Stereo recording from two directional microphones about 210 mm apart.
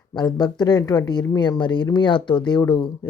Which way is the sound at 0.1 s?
20° left (ahead or behind).